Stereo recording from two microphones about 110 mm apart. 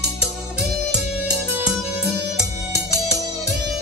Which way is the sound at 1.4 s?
5° right (ahead or behind).